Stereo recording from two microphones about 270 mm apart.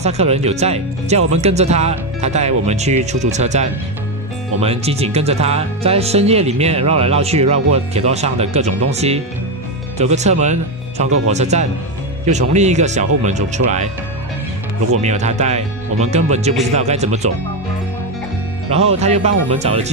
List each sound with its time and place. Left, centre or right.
0.0 s speech: right
15.0 s speech: right
18.7 s speech: right